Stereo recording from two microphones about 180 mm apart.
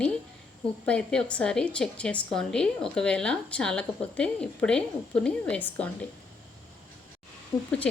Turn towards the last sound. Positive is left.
turn(degrees=15)  # may be behind; listen again after turning